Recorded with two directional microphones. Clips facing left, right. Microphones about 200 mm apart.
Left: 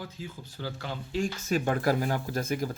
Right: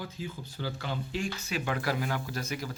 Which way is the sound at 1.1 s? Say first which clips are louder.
Left 9 dB; 50° left (ahead or behind).